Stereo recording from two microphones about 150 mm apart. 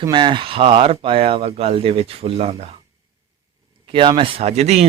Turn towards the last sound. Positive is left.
turn(degrees=-45)  # may be behind; listen again after turning